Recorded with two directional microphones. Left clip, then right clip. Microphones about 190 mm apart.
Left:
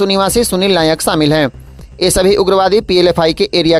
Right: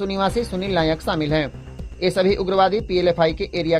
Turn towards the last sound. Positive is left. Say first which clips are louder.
# left 10 dB
turn(degrees=40)  # may be behind; listen again after turning